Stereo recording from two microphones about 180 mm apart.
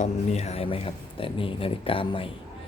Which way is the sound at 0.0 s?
40° left (ahead or behind).